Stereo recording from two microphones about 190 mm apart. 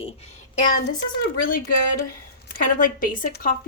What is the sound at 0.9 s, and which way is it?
Speech, 50° left (ahead or behind).